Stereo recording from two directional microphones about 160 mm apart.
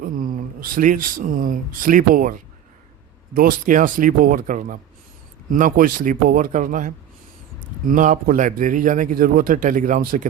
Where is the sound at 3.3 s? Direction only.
65° right (ahead or behind).